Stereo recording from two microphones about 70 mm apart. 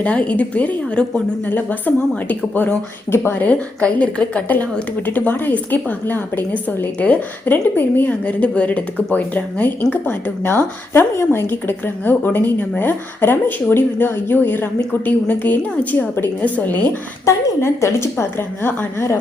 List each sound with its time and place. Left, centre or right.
0.0 s speech: centre
17.2 s a woman's voice: left